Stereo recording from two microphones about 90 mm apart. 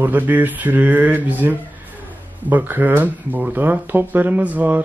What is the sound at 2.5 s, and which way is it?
Speech, 20° right (ahead or behind).